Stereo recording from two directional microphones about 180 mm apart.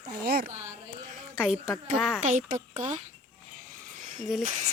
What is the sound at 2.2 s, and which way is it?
Speech, 40° right (ahead or behind).